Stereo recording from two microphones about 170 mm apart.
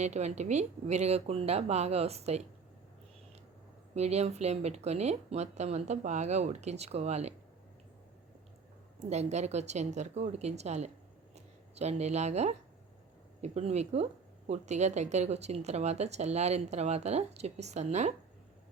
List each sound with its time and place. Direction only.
0.0 s speech: 40° right (ahead or behind)
3.9 s speech: 40° right (ahead or behind)
9.0 s speech: 40° right (ahead or behind)